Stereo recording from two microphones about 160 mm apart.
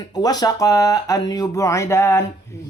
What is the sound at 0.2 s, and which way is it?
Speech, 25° left (ahead or behind).